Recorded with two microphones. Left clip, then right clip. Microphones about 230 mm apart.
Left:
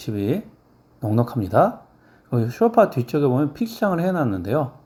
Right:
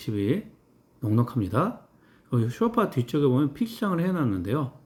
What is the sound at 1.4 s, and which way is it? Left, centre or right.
Speech, centre.